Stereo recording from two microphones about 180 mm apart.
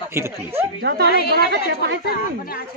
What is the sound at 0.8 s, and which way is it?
Speech, 65° right (ahead or behind).